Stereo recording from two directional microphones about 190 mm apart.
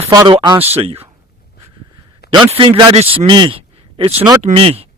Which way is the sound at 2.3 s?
25° right (ahead or behind).